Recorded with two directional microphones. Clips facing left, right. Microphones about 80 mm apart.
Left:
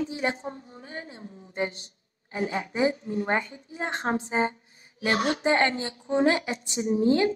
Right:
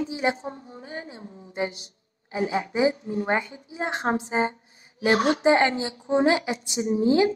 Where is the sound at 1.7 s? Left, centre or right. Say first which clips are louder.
Right 1 dB; left.